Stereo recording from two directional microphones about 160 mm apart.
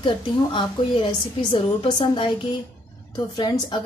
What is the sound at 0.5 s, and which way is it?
A woman's voice, 30° left (ahead or behind).